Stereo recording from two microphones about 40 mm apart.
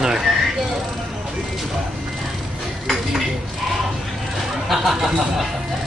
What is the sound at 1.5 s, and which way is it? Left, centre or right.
Clip-clop, centre.